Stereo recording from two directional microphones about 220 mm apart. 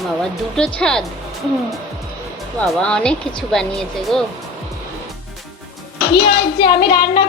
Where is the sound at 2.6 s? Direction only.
Centre (ahead or behind).